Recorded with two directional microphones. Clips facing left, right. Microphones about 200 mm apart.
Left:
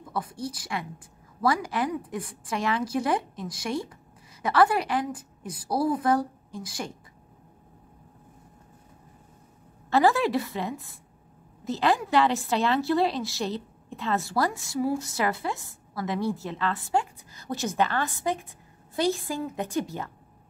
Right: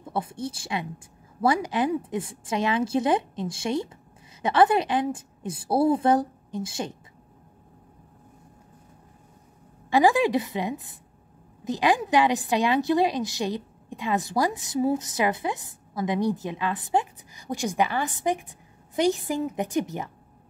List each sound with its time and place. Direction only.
0.0 s a woman's voice: 25° right (ahead or behind)
9.8 s a woman's voice: 15° right (ahead or behind)